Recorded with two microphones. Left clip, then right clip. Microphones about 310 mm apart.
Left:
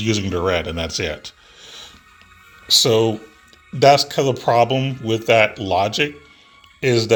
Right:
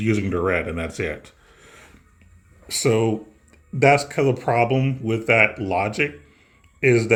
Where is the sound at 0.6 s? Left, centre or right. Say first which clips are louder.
Left 3 dB; left.